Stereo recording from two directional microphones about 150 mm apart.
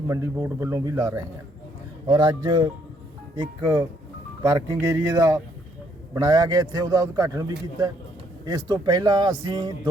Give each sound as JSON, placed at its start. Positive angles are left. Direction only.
{"t": 0.1, "sound": "a man's voice", "side_deg": -20}